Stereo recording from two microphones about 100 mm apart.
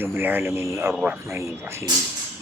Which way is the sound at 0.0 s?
20° right (ahead or behind).